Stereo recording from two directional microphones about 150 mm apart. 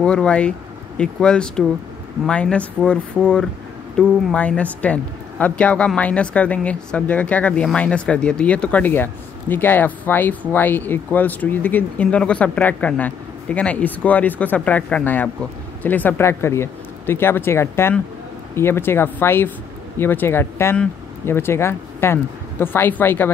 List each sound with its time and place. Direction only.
0.0 s speech: 5° left (ahead or behind)